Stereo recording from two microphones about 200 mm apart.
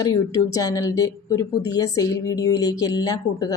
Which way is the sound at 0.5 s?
20° left (ahead or behind).